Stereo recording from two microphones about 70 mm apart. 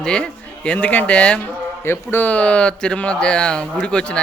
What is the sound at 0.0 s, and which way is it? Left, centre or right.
Speech, centre.